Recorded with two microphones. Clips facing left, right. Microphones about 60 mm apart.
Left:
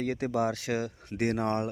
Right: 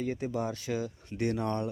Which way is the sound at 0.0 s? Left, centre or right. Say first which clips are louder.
Left 4 dB; left.